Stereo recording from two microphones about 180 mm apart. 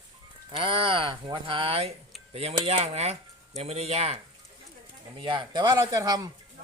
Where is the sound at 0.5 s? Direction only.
30° right (ahead or behind).